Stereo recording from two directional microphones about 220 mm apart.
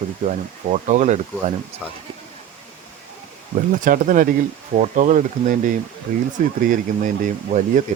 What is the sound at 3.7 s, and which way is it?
Speech, 40° right (ahead or behind).